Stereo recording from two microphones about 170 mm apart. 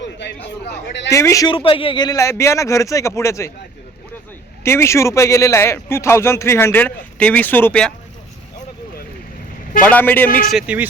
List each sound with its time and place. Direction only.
0.0 s a man's voice: 90° left
1.1 s a man's voice: 20° left (ahead or behind)
1.5 s a man's voice: 30° left (ahead or behind)
4.6 s a man's voice: 15° left (ahead or behind)
9.8 s a man's voice: 10° left (ahead or behind)
10.2 s a man's voice: 55° left (ahead or behind)
10.5 s speech: 10° right (ahead or behind)